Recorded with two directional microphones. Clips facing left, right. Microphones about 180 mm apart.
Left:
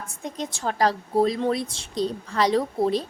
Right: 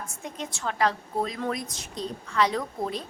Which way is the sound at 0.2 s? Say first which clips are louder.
Left 6 dB; 35° left (ahead or behind).